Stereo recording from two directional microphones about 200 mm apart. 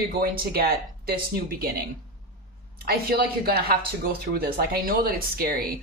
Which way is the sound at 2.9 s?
50° right (ahead or behind).